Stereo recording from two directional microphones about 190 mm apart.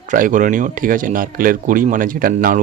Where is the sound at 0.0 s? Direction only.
45° right (ahead or behind).